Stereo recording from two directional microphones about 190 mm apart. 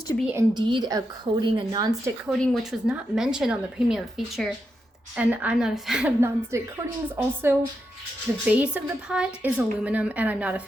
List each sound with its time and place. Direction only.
0.3 s a woman's voice: 25° right (ahead or behind)
2.4 s a woman's voice: centre (ahead or behind)